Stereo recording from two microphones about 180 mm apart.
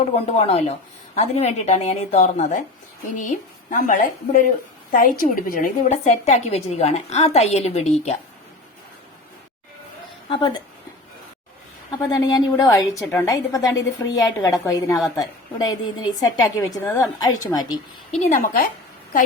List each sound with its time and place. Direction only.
0.0 s a woman's voice: 35° left (ahead or behind)
11.9 s a woman's voice: 20° left (ahead or behind)
18.2 s a woman's voice: 45° left (ahead or behind)